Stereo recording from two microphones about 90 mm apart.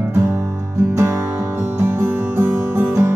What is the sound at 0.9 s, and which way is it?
Music, 30° right (ahead or behind).